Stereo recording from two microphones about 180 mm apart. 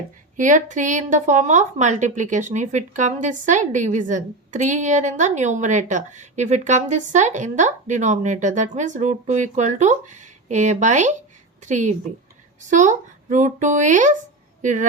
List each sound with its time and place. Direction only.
0.3 s a woman's voice: 45° right (ahead or behind)